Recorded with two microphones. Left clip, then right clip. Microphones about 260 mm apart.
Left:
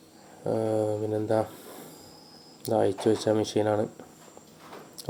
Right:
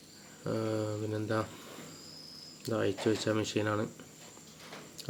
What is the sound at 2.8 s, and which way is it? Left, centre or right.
Speech, centre.